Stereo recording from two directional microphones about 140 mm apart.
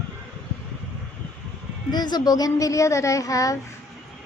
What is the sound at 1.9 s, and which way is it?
Speech, 30° left (ahead or behind).